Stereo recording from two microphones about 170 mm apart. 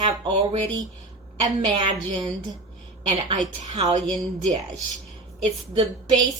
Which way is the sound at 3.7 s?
40° right (ahead or behind).